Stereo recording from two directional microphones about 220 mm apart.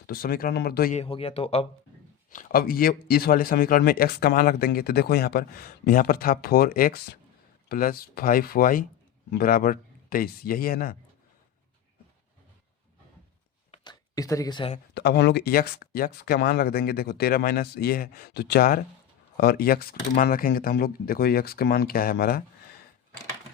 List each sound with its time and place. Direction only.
0.1 s speech: 40° left (ahead or behind)
1.0 s speech: 25° left (ahead or behind)
2.3 s speech: 40° left (ahead or behind)
13.7 s a sound: 20° left (ahead or behind)
14.9 s speech: 50° left (ahead or behind)